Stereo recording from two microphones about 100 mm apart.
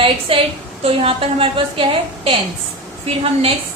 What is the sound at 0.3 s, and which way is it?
A woman's voice, 65° right (ahead or behind).